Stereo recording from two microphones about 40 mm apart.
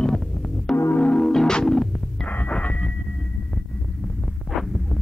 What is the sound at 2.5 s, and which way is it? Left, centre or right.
Sonar, left.